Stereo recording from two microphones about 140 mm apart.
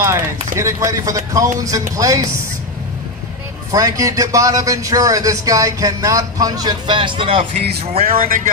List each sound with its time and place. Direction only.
0.0 s a man's voice: 20° right (ahead or behind)
3.7 s a man's voice: 25° right (ahead or behind); by 8.0 s 45° right (ahead or behind)